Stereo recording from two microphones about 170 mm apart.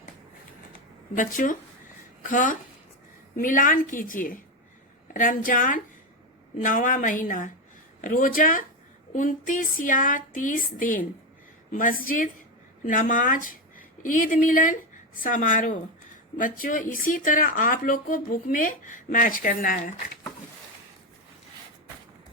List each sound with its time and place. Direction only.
1.1 s speech: 50° left (ahead or behind)